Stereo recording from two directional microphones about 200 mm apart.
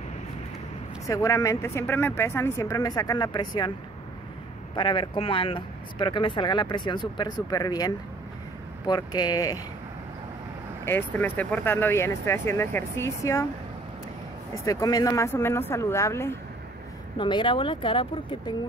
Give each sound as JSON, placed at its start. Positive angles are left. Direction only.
{"t": 1.0, "sound": "speech", "side_deg": 15}
{"t": 4.7, "sound": "speech", "side_deg": 25}
{"t": 10.9, "sound": "speech", "side_deg": 10}
{"t": 14.6, "sound": "speech", "side_deg": 15}